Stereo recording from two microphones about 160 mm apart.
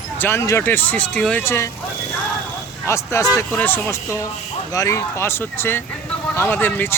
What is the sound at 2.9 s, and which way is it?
Speech, 20° left (ahead or behind).